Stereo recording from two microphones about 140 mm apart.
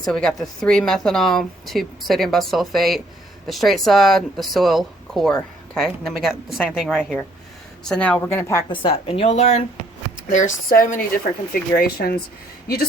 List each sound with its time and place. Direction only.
0.0 s speech: 5° left (ahead or behind)
8.3 s a woman's voice: 20° left (ahead or behind)
8.7 s speech: 40° left (ahead or behind)
10.2 s speech: 75° left (ahead or behind)
11.5 s speech: 90° left